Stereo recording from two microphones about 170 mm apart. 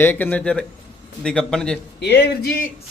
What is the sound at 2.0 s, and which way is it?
Speech, 80° left.